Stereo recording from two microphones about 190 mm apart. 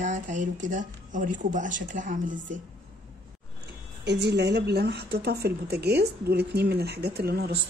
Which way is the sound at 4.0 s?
65° right (ahead or behind).